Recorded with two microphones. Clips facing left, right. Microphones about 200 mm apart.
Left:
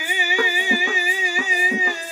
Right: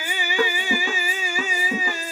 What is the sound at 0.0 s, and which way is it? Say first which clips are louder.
Music: even; 15° left (ahead or behind).